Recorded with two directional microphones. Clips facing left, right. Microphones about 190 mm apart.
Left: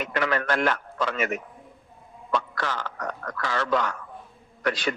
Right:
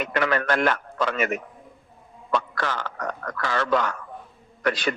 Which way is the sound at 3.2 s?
60° right (ahead or behind).